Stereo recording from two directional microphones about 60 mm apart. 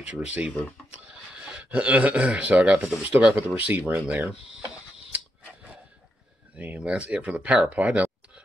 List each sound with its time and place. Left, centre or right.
0.0 s a man's voice: right
6.5 s speech: right